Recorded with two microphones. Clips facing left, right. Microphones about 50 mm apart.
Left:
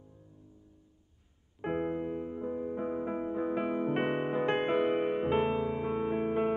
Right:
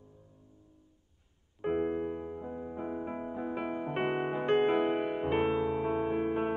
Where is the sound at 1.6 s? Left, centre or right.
Centre.